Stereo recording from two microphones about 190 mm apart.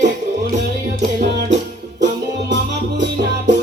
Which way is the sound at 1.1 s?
60° right (ahead or behind).